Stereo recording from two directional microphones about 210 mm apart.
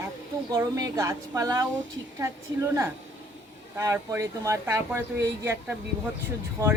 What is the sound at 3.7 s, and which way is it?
A woman's voice, 15° right (ahead or behind).